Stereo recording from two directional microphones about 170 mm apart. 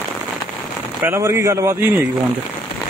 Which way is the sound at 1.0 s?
15° right (ahead or behind).